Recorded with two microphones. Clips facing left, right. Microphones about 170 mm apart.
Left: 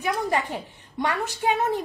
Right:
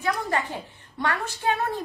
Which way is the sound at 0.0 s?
15° left (ahead or behind).